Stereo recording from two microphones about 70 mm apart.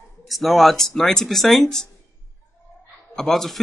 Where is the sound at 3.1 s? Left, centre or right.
Centre.